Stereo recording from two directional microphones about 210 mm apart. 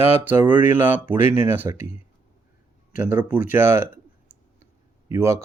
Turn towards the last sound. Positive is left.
turn(degrees=-15)  # may be behind; listen again after turning